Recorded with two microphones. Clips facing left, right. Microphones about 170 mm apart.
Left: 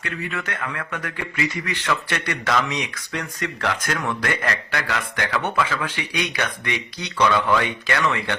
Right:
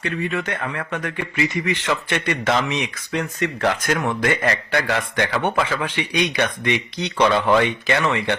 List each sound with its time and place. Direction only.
0.0 s speech: 25° right (ahead or behind)